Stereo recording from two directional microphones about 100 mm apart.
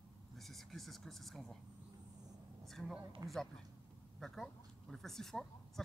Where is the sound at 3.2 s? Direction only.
35° right (ahead or behind).